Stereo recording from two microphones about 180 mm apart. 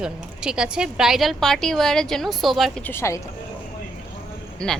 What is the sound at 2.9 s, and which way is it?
Speech, 15° left (ahead or behind).